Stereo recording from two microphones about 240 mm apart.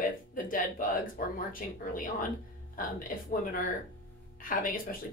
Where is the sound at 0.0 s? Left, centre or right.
Left.